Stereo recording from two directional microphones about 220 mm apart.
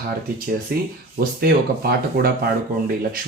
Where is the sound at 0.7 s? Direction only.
45° right (ahead or behind).